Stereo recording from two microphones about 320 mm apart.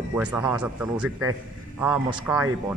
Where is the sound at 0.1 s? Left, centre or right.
Centre.